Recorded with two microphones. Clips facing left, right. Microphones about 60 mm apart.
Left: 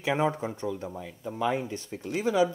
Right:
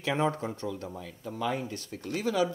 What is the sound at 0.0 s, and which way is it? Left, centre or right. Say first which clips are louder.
Speech: left 2 dB; centre.